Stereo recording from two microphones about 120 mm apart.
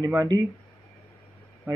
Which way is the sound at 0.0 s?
30° right (ahead or behind).